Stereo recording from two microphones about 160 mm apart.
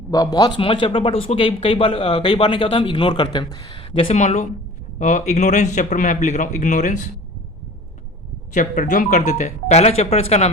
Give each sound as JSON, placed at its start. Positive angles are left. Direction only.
{"t": 0.1, "sound": "a man's voice", "side_deg": 25}
{"t": 8.5, "sound": "a man's voice", "side_deg": 55}